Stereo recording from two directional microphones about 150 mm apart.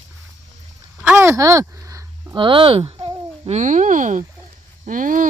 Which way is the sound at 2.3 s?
35° right (ahead or behind).